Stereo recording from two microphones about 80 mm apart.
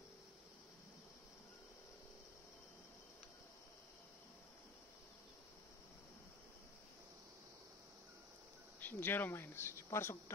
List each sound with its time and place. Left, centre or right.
8.7 s speech: left